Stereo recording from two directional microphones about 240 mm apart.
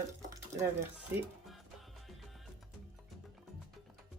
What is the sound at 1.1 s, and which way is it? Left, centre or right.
Speech, centre.